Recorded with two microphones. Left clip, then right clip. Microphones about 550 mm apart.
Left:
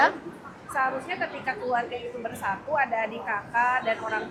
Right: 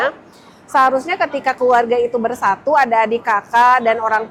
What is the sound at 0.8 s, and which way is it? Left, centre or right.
A woman's voice, right.